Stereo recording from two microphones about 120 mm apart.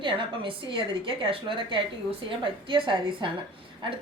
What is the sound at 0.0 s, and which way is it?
A woman's voice, 45° right (ahead or behind).